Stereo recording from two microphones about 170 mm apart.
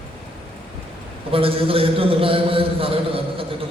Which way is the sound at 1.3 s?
35° right (ahead or behind).